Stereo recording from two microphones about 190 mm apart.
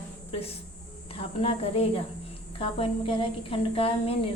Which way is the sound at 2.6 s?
25° left (ahead or behind).